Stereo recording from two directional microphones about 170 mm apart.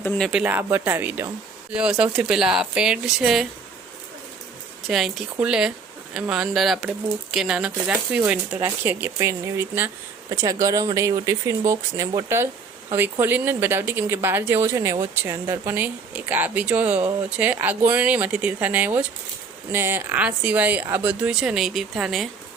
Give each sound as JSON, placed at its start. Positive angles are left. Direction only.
{"t": 0.0, "sound": "speech", "side_deg": 10}
{"t": 0.3, "sound": "speech", "side_deg": -5}
{"t": 4.9, "sound": "speech", "side_deg": 0}